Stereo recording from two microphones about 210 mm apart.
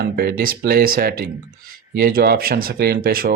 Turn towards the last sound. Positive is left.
turn(degrees=-45)  # may be behind; listen again after turning